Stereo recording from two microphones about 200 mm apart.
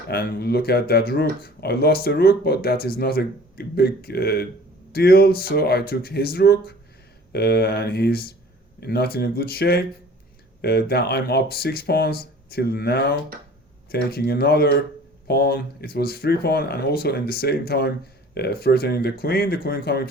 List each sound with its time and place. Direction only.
0.1 s speech: 50° left (ahead or behind)